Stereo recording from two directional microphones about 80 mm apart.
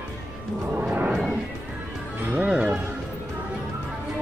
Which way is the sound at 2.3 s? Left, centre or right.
Centre.